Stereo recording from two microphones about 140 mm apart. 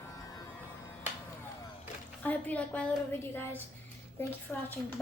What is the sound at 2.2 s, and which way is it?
A woman's voice, 10° left (ahead or behind).